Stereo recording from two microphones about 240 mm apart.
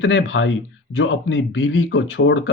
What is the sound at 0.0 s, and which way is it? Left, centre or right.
Speech, left.